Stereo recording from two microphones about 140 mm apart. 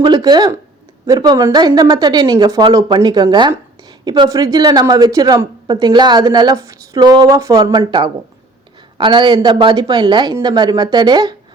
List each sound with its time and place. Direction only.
0.0 s a woman's voice: 30° right (ahead or behind)